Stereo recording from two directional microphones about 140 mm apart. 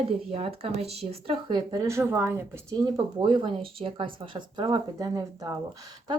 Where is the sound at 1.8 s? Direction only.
20° right (ahead or behind).